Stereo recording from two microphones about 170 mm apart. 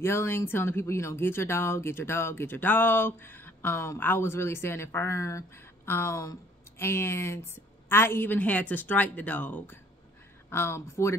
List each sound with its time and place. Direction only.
0.0 s speech: 15° left (ahead or behind)